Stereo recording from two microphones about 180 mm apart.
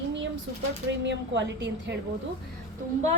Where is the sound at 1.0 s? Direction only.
80° right.